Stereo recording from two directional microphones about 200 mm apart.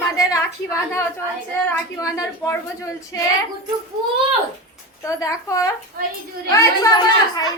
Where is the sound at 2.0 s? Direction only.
15° left (ahead or behind).